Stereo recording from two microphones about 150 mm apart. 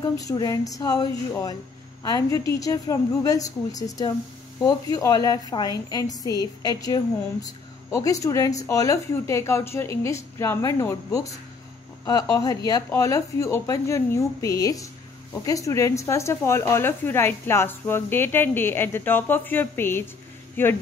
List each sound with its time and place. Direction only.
0.2 s speech: 25° left (ahead or behind)
2.0 s a woman's voice: 25° left (ahead or behind)